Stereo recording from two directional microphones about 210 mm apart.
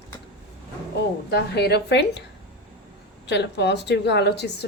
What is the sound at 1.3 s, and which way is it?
Speech, 50° left (ahead or behind).